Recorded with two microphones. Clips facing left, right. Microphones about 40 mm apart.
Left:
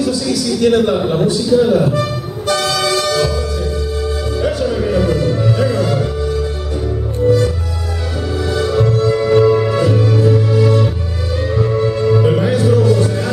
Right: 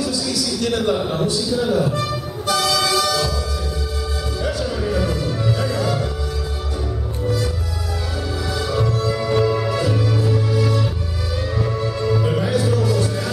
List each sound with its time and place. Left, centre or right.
0.6 s speech: centre
4.4 s music: centre